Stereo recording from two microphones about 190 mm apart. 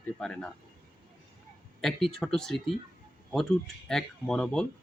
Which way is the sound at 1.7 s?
Centre (ahead or behind).